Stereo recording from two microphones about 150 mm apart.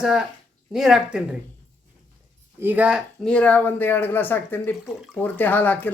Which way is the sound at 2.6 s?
10° right (ahead or behind).